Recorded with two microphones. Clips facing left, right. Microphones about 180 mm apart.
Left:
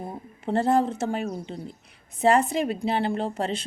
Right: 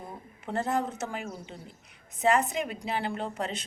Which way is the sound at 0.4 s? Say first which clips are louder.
Left 7 dB; 30° left (ahead or behind).